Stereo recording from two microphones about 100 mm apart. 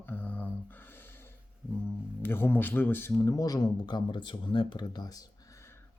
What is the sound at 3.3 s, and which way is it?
Speech, 40° left (ahead or behind).